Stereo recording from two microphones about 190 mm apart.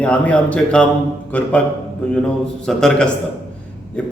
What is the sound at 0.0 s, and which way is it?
A man's voice, 5° left (ahead or behind).